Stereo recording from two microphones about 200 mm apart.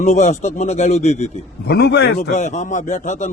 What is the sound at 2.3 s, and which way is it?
A man's voice, 35° left (ahead or behind).